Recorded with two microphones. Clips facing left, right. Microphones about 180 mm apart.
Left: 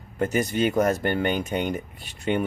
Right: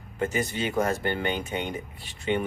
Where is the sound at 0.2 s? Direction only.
40° left (ahead or behind).